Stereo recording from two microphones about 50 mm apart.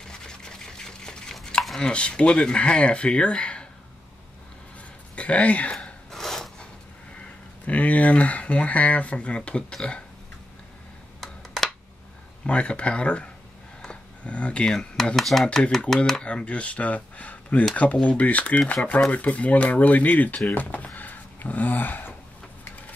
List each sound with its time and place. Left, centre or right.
0.3 s a sound: centre
1.8 s speech: left
5.1 s speech: left
6.1 s filing: centre
7.6 s speech: left
11.1 s a sound: centre
12.4 s speech: left
13.8 s a sound: left
14.7 s speech: centre
16.3 s speech: left